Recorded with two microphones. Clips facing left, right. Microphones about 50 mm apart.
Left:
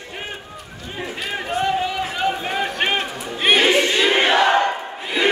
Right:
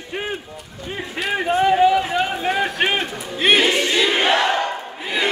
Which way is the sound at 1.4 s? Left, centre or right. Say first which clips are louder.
Right 7 dB; centre.